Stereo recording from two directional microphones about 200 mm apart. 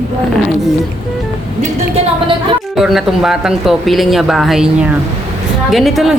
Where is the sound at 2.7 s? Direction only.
Centre (ahead or behind).